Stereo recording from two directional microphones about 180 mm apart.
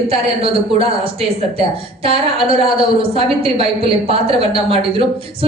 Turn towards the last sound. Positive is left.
turn(degrees=-30)  # may be behind; listen again after turning